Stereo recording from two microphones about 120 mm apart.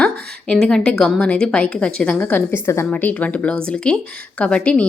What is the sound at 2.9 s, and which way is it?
A woman's voice, 15° left (ahead or behind).